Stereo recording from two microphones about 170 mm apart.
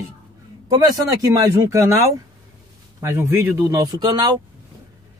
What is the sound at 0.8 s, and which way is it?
Speech, 20° right (ahead or behind).